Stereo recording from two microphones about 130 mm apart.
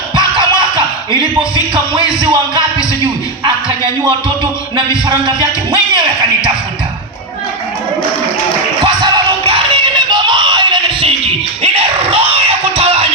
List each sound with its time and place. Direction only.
0.2 s music: 35° right (ahead or behind)
2.2 s music: 35° right (ahead or behind)
5.0 s speech: 35° right (ahead or behind)
8.8 s music: 30° right (ahead or behind)
9.4 s music: 45° right (ahead or behind)
10.1 s music: 35° right (ahead or behind); by 13.1 s 50° right (ahead or behind)